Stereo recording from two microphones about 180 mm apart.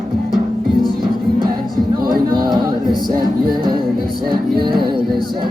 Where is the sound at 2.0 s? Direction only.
55° right (ahead or behind).